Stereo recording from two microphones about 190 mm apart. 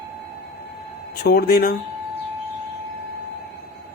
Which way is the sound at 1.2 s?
50° left (ahead or behind).